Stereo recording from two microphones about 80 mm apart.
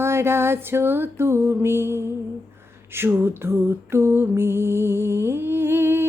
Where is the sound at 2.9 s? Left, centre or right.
Right.